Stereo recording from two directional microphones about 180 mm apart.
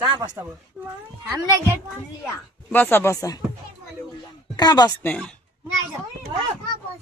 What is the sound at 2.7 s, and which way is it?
Speech, 10° left (ahead or behind).